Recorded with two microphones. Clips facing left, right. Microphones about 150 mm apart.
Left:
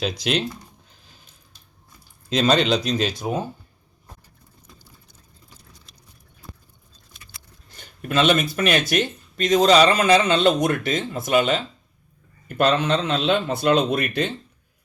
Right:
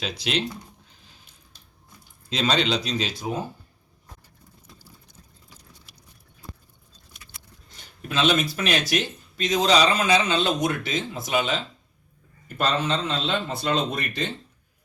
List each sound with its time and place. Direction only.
0.0 s speech: 45° left (ahead or behind)
2.3 s speech: 50° left (ahead or behind)
7.8 s speech: 55° left (ahead or behind)
12.5 s speech: 65° left (ahead or behind)